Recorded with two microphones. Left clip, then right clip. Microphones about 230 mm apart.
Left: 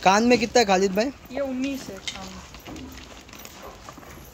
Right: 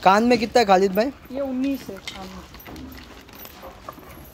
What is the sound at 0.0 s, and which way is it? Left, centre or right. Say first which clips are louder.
Speech: right 2 dB; centre.